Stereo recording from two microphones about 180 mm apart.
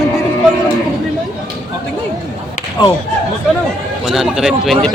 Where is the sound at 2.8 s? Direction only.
25° left (ahead or behind).